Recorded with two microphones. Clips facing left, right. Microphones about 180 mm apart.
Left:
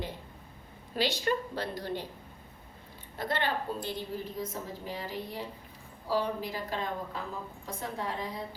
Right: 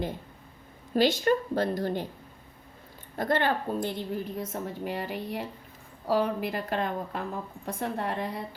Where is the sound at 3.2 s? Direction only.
50° right (ahead or behind).